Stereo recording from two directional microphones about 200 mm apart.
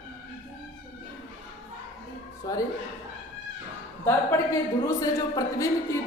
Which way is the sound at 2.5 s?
20° left (ahead or behind).